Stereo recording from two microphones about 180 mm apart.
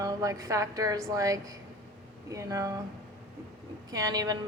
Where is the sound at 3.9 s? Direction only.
20° right (ahead or behind).